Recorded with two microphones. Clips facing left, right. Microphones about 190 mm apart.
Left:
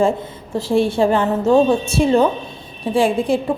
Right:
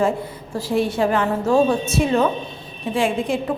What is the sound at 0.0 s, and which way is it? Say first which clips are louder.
A woman's voice: left 3 dB; 25° left (ahead or behind).